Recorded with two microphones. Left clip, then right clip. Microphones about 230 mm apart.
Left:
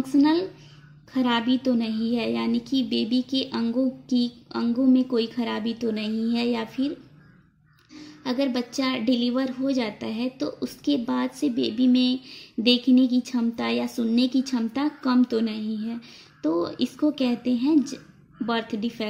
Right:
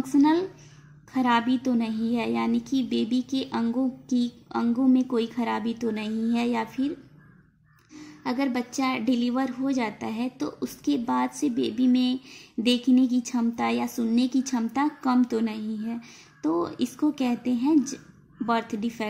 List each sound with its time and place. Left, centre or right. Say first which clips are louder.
0.0 s a woman's voice: left 1 dB; centre
6.0 s a woman's voice: left 1 dB; right
6.3 s a woman's voice: even; centre
8.2 s a woman's voice: left 2 dB; centre